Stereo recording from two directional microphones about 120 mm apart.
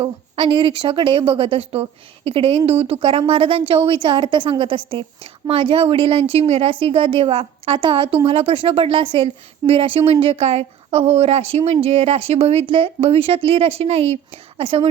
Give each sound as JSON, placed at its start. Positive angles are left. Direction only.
{"t": 0.0, "sound": "a woman's voice", "side_deg": -45}